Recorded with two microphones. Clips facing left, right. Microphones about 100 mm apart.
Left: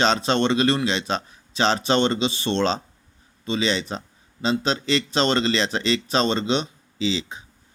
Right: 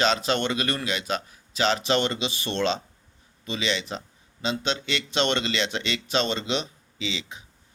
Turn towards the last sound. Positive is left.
turn(degrees=35)  # may be behind; listen again after turning